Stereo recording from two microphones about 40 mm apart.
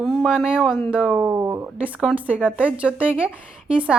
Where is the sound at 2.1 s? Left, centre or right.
Right.